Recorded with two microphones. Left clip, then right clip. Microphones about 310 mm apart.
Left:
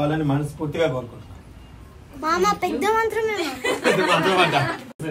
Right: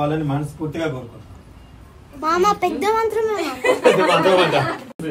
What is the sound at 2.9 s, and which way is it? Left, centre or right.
Speech, centre.